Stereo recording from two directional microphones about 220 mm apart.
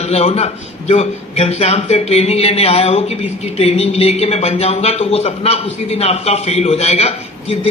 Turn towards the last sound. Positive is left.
turn(degrees=30)  # may be behind; listen again after turning